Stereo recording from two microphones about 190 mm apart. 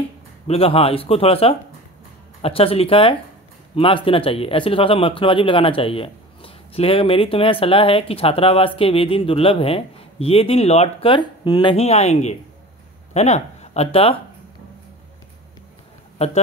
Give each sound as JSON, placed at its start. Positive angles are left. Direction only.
{"t": 0.5, "sound": "a man's voice", "side_deg": 30}